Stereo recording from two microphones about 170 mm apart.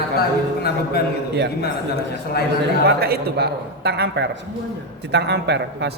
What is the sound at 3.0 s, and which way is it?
A man's voice, 65° right (ahead or behind).